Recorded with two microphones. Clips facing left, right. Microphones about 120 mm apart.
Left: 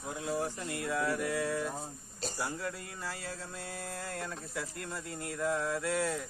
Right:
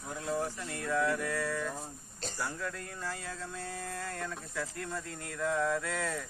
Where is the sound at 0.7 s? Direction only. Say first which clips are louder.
Right 3 dB; 10° left (ahead or behind).